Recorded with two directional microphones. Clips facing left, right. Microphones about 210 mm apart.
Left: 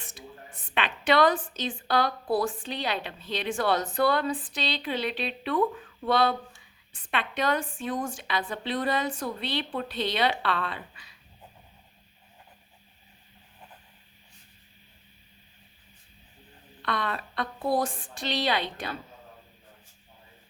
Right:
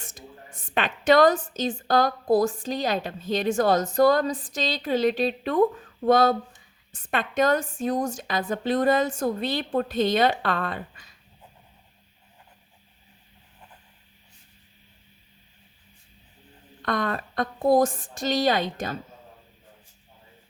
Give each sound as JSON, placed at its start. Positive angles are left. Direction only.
{"t": 0.0, "sound": "a woman's voice", "side_deg": -45}
{"t": 16.8, "sound": "a woman's voice", "side_deg": -45}